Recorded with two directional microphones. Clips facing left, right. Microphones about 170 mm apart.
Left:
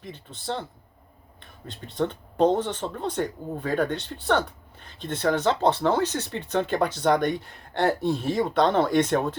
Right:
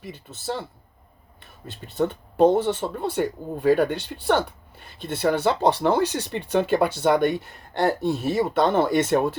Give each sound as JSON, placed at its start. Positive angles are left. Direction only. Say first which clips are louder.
{"t": 0.0, "sound": "speech", "louder": "right 3 dB", "side_deg": -5}